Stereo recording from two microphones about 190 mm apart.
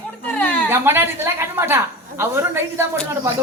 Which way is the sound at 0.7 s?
10° right (ahead or behind).